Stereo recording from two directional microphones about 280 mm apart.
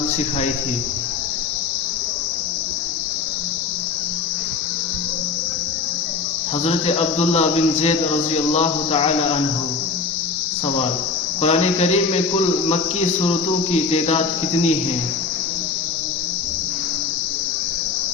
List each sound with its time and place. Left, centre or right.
6.7 s speech: left
11.4 s speech: left